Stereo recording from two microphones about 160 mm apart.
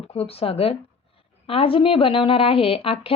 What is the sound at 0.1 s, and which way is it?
A woman's voice, 40° left (ahead or behind).